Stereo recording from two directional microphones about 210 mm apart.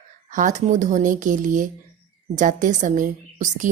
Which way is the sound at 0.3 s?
35° right (ahead or behind).